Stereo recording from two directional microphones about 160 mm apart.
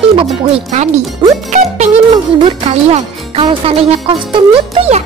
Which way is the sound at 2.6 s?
40° right (ahead or behind).